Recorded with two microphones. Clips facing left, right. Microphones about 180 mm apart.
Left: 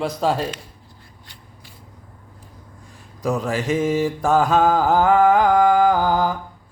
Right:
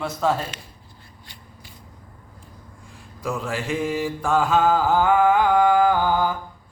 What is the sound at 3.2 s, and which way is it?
Speech, 40° left (ahead or behind).